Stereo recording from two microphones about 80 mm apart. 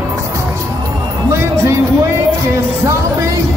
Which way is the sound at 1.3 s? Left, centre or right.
Right.